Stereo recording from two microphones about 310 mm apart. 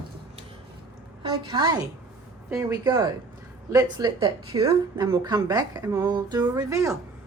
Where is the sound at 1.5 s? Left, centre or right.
Centre.